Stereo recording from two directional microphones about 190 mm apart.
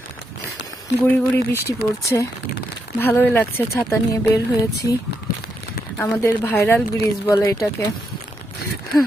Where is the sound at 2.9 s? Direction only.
10° left (ahead or behind).